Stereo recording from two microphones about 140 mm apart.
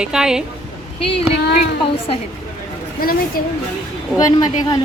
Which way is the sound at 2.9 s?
90° left.